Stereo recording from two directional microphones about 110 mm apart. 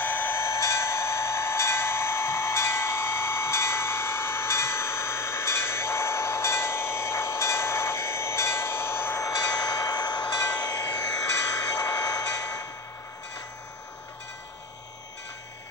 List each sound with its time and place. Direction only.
0.0 s a sound: 20° left (ahead or behind)
9.3 s train: 35° left (ahead or behind)
10.5 s vehicle: 35° left (ahead or behind)